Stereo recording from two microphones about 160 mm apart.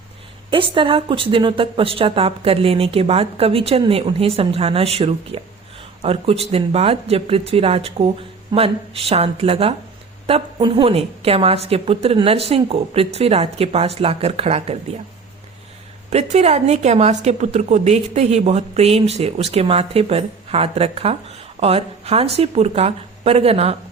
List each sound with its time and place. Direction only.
0.5 s a woman's voice: 30° right (ahead or behind)
16.0 s a woman's voice: 45° right (ahead or behind)